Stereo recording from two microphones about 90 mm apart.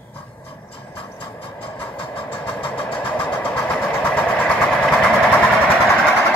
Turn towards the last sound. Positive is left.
turn(degrees=10)  # may be behind; listen again after turning